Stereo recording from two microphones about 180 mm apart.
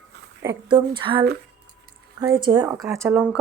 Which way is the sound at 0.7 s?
30° right (ahead or behind).